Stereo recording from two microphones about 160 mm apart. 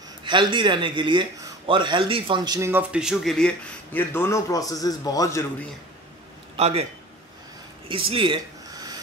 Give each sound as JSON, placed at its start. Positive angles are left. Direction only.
{"t": 0.2, "sound": "speech", "side_deg": -30}
{"t": 2.7, "sound": "speech", "side_deg": -5}
{"t": 6.5, "sound": "a man's voice", "side_deg": -40}
{"t": 7.9, "sound": "a sound", "side_deg": -35}